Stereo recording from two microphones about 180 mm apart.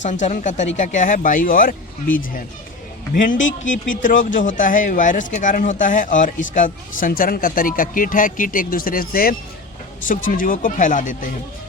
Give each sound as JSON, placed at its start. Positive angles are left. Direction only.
{"t": 0.0, "sound": "speech", "side_deg": 45}
{"t": 3.3, "sound": "speech", "side_deg": 90}
{"t": 3.7, "sound": "speech", "side_deg": 45}